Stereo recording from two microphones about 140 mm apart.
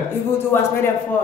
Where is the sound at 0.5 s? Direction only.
15° left (ahead or behind).